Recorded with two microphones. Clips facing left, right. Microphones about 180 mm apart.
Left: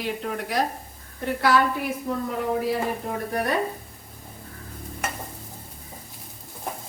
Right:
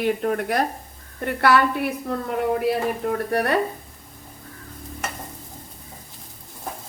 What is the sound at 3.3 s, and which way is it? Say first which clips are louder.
Speech: right 3 dB; 70° right (ahead or behind).